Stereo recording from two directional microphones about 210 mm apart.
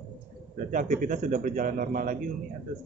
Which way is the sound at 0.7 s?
40° right (ahead or behind).